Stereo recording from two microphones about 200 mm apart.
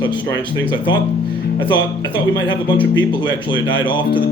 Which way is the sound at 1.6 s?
25° left (ahead or behind).